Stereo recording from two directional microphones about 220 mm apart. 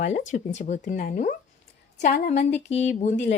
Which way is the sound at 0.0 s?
35° left (ahead or behind).